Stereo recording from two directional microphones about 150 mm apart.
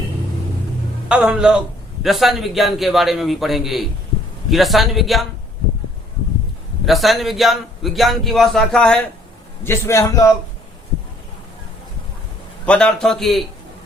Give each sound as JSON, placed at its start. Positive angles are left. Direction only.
{"t": 1.0, "sound": "a man's voice", "side_deg": -5}
{"t": 6.8, "sound": "a man's voice", "side_deg": 0}
{"t": 9.6, "sound": "a man's voice", "side_deg": 20}
{"t": 12.6, "sound": "a man's voice", "side_deg": 5}